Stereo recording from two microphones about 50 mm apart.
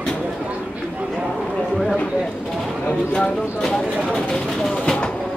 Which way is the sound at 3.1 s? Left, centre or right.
Centre.